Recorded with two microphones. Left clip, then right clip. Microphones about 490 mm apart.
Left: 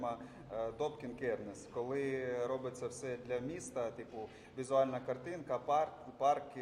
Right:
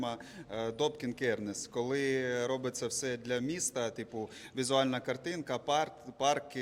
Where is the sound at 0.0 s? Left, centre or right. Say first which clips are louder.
Right 2 dB; right.